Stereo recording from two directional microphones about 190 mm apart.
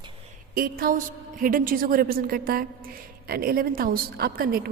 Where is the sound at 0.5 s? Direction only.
50° right (ahead or behind).